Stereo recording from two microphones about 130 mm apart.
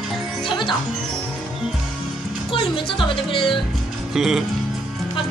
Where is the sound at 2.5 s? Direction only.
40° left (ahead or behind).